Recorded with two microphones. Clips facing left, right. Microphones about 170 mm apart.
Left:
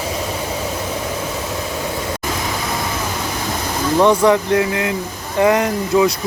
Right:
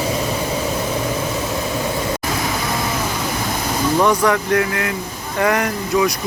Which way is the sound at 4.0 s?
20° left (ahead or behind).